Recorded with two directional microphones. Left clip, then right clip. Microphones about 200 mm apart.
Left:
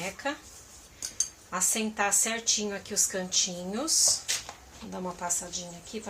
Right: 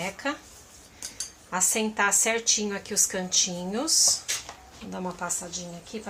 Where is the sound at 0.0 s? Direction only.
30° right (ahead or behind).